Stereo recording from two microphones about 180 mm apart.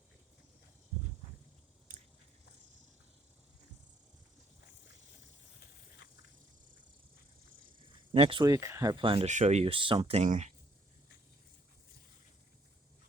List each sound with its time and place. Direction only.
1.9 s biting: 45° right (ahead or behind)
8.1 s speech: 30° right (ahead or behind)